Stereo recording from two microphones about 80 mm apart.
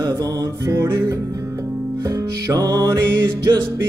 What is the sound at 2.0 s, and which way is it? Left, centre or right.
Music, right.